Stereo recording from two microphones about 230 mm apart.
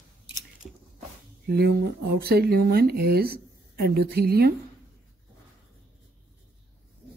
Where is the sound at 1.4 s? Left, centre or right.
Right.